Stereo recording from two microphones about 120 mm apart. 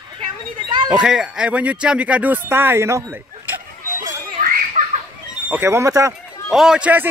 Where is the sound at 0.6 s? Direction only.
35° right (ahead or behind).